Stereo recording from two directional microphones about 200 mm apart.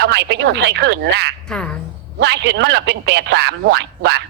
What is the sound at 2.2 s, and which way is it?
Speech, 60° right (ahead or behind).